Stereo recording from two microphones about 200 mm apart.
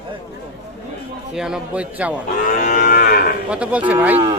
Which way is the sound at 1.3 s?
5° right (ahead or behind).